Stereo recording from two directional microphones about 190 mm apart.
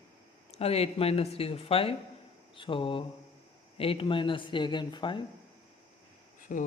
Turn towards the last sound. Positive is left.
turn(degrees=45)  # may be behind; listen again after turning